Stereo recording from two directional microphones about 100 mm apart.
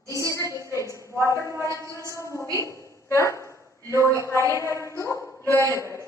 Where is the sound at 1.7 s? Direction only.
30° right (ahead or behind).